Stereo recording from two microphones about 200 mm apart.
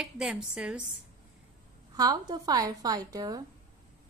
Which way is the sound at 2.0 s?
20° right (ahead or behind).